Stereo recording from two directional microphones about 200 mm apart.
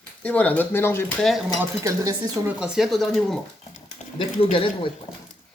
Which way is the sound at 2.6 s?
5° right (ahead or behind).